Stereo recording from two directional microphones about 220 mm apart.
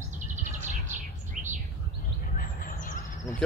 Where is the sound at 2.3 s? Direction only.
40° left (ahead or behind).